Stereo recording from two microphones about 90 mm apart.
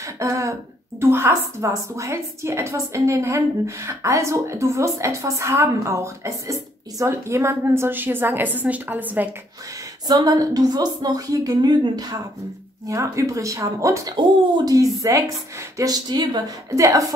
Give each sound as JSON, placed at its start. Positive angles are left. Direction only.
{"t": 0.0, "sound": "throat clearing", "side_deg": -35}
{"t": 1.1, "sound": "a woman's voice", "side_deg": -30}
{"t": 10.0, "sound": "a woman's voice", "side_deg": -45}
{"t": 12.8, "sound": "a woman's voice", "side_deg": -35}
{"t": 15.8, "sound": "a woman's voice", "side_deg": -50}
{"t": 16.7, "sound": "a woman's voice", "side_deg": -35}